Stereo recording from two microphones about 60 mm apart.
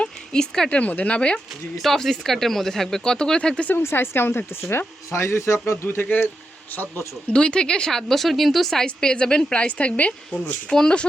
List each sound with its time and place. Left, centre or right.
0.0 s a sound: centre
0.7 s a woman's voice: left
1.8 s speech: centre
3.7 s speech: left
7.3 s speech: centre